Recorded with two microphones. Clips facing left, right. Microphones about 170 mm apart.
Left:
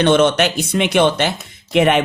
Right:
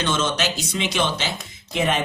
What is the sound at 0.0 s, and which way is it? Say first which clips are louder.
Speech: left 10 dB; 60° left (ahead or behind).